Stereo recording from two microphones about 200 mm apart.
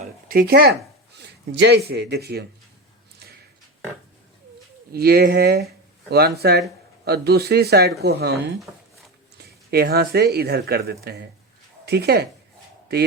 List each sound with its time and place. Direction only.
0.0 s a sound: 45° right (ahead or behind)
1.9 s a man's voice: 55° right (ahead or behind)
4.9 s a man's voice: 50° right (ahead or behind)